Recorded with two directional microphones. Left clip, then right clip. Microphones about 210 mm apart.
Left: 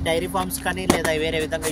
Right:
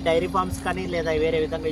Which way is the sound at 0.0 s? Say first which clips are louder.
Right 1 dB; 35° left (ahead or behind).